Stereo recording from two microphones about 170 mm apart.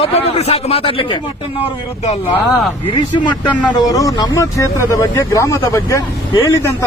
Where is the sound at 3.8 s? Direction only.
20° left (ahead or behind).